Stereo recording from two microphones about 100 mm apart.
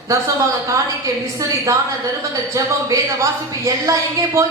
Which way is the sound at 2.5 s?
35° right (ahead or behind).